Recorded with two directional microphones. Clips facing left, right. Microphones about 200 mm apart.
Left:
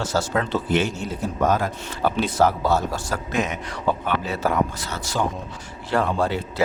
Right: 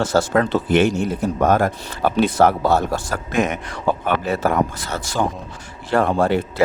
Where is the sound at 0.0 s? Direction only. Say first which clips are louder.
Right 6 dB; 55° right (ahead or behind).